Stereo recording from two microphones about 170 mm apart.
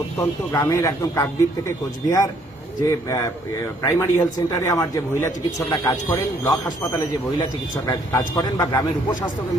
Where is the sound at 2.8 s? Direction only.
20° left (ahead or behind).